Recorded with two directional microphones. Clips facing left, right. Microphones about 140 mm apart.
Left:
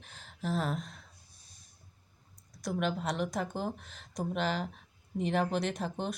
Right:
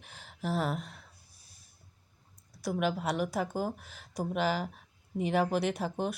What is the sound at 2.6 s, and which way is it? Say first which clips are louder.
Speech: right 2 dB; 10° right (ahead or behind).